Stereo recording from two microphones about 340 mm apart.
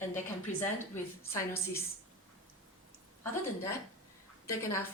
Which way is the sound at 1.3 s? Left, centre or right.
Centre.